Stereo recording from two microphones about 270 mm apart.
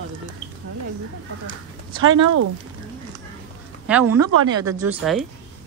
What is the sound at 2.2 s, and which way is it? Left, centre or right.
Speech, right.